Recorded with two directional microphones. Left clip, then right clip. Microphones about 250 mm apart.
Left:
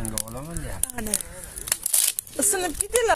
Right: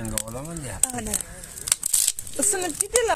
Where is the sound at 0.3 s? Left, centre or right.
Right.